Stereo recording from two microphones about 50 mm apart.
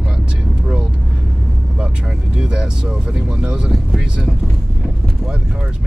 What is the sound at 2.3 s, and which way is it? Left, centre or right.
Vehicle, centre.